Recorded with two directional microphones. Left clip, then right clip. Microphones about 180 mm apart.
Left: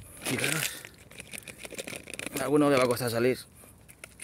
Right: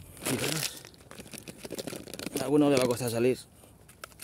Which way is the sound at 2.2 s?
10° right (ahead or behind).